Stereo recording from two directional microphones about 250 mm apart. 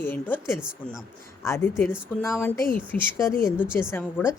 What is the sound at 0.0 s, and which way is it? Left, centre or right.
Speech, centre.